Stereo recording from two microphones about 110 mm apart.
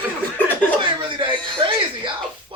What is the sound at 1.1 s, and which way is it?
Speech, 50° right (ahead or behind).